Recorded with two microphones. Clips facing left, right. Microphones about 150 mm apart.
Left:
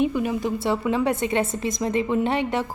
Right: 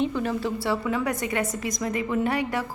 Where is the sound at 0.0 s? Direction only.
15° left (ahead or behind).